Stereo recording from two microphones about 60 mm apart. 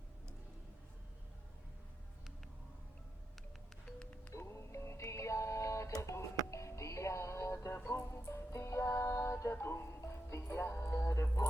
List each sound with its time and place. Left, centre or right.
4.0 s music: left
4.4 s music: left
7.8 s music: left
8.1 s music: left